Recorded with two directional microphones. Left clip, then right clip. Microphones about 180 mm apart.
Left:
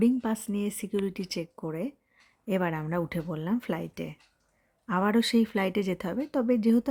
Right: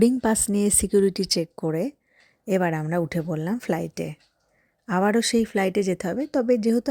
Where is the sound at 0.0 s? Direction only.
30° right (ahead or behind).